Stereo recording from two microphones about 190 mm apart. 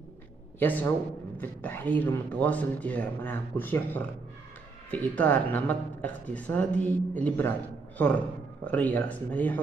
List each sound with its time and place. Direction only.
0.6 s speech: 10° left (ahead or behind)
8.6 s speech: 10° left (ahead or behind)